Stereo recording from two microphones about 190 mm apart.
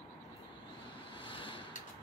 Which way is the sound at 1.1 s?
25° left (ahead or behind).